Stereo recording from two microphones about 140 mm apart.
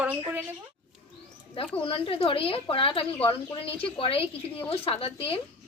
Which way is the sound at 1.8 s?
40° left (ahead or behind).